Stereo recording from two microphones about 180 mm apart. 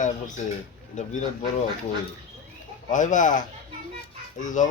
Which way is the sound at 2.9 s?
45° left (ahead or behind).